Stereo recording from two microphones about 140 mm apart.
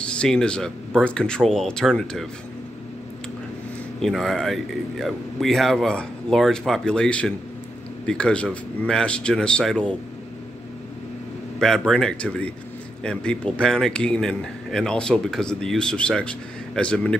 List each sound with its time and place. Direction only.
0.0 s speech: 5° left (ahead or behind)
4.0 s a man's voice: centre (ahead or behind)
11.6 s speech: 5° left (ahead or behind)